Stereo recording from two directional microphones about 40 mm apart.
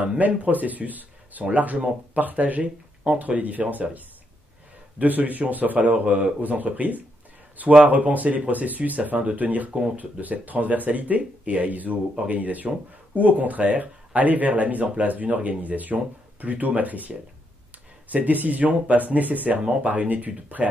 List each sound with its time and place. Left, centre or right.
0.3 s speech: right
4.9 s speech: right